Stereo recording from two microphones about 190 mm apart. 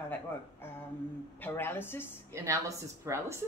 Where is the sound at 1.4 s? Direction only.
10° left (ahead or behind).